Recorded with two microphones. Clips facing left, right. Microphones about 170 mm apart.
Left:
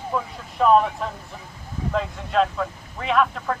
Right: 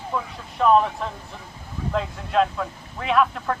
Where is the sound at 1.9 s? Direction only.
Centre (ahead or behind).